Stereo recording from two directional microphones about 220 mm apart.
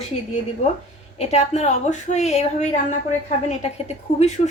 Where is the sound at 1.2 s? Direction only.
30° left (ahead or behind).